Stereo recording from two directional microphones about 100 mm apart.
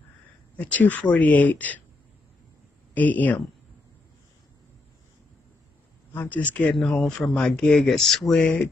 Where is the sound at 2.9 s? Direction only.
15° left (ahead or behind).